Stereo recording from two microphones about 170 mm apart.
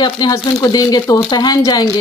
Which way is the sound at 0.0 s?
25° left (ahead or behind).